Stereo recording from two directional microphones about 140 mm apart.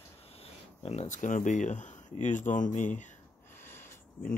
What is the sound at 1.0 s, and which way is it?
Speech, 65° left (ahead or behind).